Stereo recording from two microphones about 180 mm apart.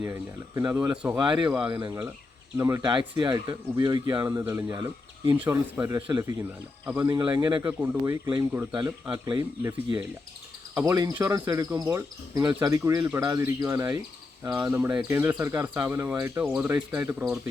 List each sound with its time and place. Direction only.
0.0 s speech: 15° right (ahead or behind)
1.7 s speech: 25° right (ahead or behind)
6.0 s speech: 25° right (ahead or behind)
7.1 s speech: 25° right (ahead or behind)
7.6 s speech: 10° right (ahead or behind)